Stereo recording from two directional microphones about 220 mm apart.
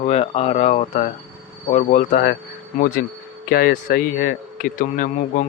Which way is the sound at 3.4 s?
40° left (ahead or behind).